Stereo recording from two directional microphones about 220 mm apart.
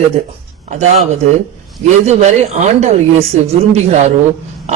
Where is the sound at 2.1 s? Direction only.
30° right (ahead or behind).